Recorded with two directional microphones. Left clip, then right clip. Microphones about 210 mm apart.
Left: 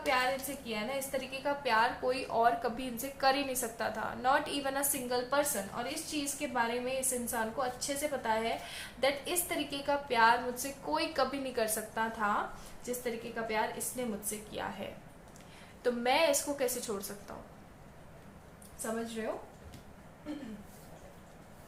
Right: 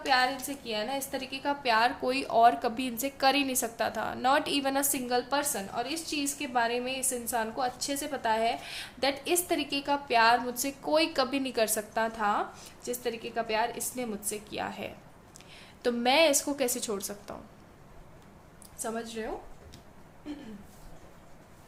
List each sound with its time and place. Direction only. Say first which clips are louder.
0.0 s a woman's voice: right 4 dB; 50° right (ahead or behind)